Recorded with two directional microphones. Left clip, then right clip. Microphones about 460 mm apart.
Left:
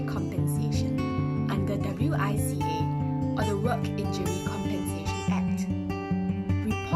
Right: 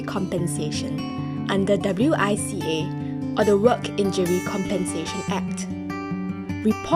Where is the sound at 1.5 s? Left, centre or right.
Centre.